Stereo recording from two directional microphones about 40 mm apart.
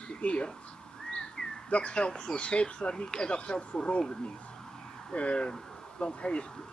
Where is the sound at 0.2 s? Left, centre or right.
Left.